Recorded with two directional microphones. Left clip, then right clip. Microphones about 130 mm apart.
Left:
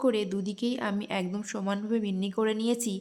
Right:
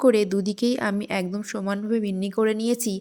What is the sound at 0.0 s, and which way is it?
A woman's voice, 45° right (ahead or behind).